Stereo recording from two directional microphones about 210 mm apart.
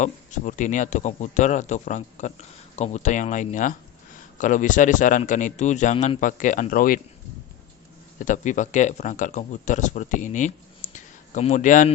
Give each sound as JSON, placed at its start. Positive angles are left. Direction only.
{"t": 0.0, "sound": "speech", "side_deg": 35}
{"t": 8.2, "sound": "a man's voice", "side_deg": 35}